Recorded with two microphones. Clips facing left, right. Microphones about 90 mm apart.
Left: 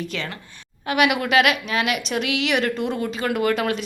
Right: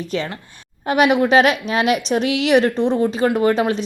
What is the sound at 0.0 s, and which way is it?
A woman's voice, 35° right (ahead or behind).